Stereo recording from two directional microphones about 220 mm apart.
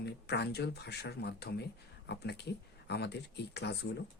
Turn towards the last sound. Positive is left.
turn(degrees=50)  # may be behind; listen again after turning